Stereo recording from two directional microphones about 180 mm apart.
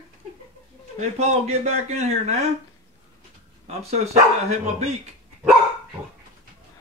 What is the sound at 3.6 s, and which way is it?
A man's voice, 35° right (ahead or behind).